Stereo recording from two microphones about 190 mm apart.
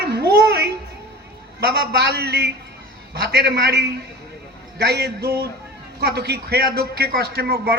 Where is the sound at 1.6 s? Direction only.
55° right (ahead or behind).